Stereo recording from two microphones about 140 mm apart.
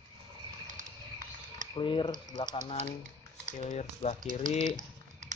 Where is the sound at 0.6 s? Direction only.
65° right (ahead or behind).